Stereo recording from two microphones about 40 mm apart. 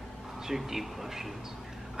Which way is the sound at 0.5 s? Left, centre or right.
Centre.